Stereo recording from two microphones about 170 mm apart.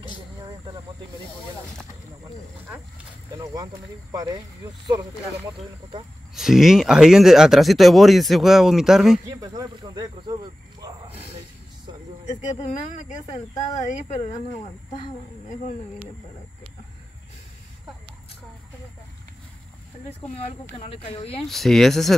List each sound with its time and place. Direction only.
3.5 s speech: 20° right (ahead or behind)
6.3 s speech: centre (ahead or behind)
9.3 s speech: 25° right (ahead or behind)
12.4 s speech: 45° left (ahead or behind)
20.1 s speech: 40° left (ahead or behind)
21.5 s speech: centre (ahead or behind)